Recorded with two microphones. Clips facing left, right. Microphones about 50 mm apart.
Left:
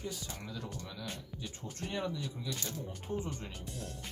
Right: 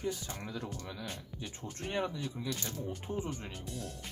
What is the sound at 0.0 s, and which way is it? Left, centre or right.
Speech, right.